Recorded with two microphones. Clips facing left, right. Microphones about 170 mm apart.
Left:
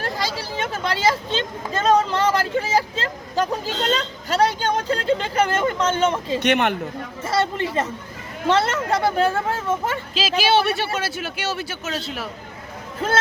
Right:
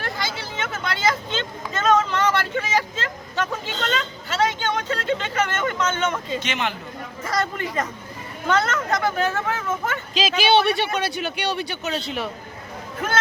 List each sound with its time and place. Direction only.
0.0 s speech: 35° left (ahead or behind)
6.4 s speech: 60° left (ahead or behind)
7.2 s speech: 25° left (ahead or behind)
10.2 s speech: centre (ahead or behind)
13.0 s speech: 30° left (ahead or behind)